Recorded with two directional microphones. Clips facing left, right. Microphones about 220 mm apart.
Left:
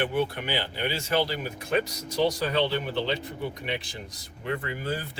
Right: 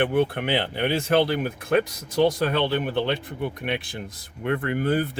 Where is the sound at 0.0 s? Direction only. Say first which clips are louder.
Right 5 dB; 55° right (ahead or behind).